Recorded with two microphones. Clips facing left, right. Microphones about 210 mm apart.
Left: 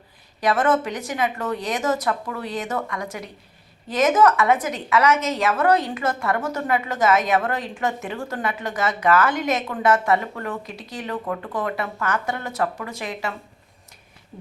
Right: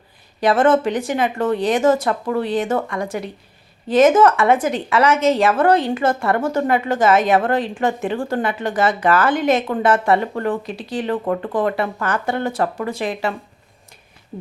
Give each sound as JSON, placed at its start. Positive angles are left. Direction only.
{"t": 0.3, "sound": "a woman's voice", "side_deg": -30}